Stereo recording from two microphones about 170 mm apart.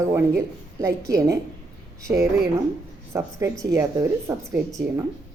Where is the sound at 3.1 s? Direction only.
15° right (ahead or behind).